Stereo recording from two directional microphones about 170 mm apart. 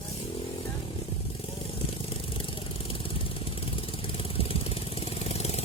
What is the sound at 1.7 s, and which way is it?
Vehicle, 30° left (ahead or behind).